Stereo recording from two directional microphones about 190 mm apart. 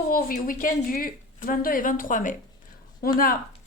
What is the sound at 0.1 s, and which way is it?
A woman's voice, 50° left (ahead or behind).